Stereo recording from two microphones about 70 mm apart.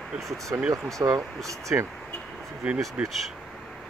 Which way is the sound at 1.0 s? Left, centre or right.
Right.